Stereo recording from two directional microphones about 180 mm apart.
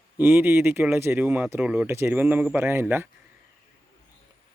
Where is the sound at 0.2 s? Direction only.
10° right (ahead or behind).